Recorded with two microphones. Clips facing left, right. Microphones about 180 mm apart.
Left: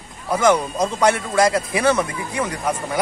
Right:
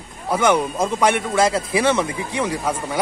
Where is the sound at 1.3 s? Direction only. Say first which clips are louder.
Even; 25° right (ahead or behind).